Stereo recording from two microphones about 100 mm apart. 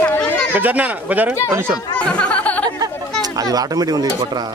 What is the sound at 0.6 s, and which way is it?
Speech, 15° right (ahead or behind).